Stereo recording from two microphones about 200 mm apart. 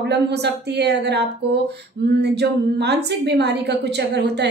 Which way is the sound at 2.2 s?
55° right (ahead or behind).